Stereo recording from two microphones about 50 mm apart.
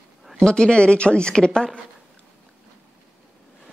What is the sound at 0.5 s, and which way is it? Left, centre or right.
Speech, centre.